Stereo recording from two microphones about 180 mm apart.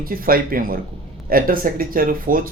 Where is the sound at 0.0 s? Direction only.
55° right (ahead or behind).